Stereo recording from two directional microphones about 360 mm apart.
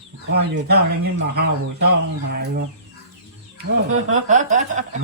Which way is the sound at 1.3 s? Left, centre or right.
Right.